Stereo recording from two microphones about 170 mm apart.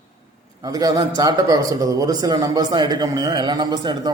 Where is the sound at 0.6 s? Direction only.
20° right (ahead or behind).